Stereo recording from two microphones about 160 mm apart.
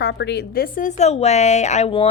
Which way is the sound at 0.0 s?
90° left.